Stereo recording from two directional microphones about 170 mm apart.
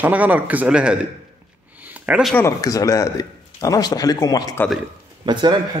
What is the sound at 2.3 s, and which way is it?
Speech, 20° left (ahead or behind).